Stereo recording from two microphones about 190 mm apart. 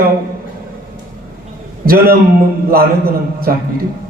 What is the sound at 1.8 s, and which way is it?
A man's voice, 50° right (ahead or behind).